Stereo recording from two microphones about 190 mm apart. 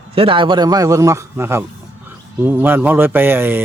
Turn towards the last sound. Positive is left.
turn(degrees=-10)  # may be behind; listen again after turning